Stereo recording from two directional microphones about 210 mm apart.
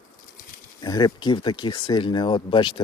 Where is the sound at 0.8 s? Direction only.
20° left (ahead or behind).